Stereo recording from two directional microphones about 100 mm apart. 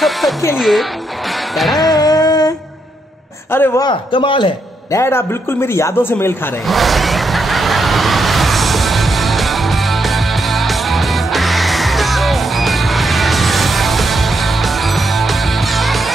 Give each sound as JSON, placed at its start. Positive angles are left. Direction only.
{"t": 0.0, "sound": "music", "side_deg": 0}
{"t": 2.0, "sound": "a sound", "side_deg": 40}
{"t": 3.5, "sound": "a man's voice", "side_deg": 20}
{"t": 4.1, "sound": "a man's voice", "side_deg": 55}
{"t": 4.9, "sound": "a man's voice", "side_deg": 25}
{"t": 6.7, "sound": "vehicle", "side_deg": 0}